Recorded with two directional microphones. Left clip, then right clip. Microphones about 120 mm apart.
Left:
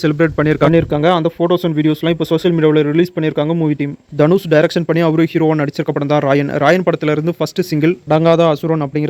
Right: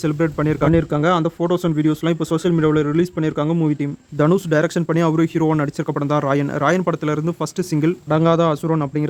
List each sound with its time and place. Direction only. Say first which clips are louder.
0.0 s speech: left 6 dB; 30° left (ahead or behind)
0.7 s speech: left 4 dB; 20° left (ahead or behind)